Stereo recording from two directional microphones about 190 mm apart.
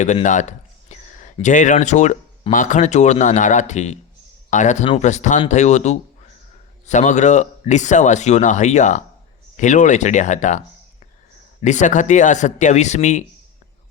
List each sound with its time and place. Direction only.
0.0 s speech: 40° left (ahead or behind)
11.6 s speech: 40° left (ahead or behind)